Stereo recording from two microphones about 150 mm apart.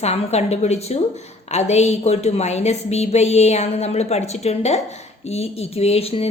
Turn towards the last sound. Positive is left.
turn(degrees=40)  # may be behind; listen again after turning